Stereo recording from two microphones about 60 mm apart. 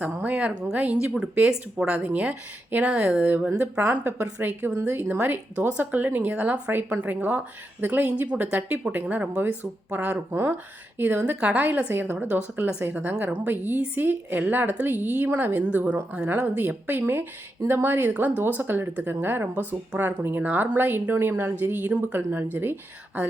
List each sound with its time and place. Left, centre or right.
0.0 s a woman's voice: right
2.0 s a woman's voice: right
3.2 s a woman's voice: right
3.8 s a woman's voice: right
4.4 s a woman's voice: right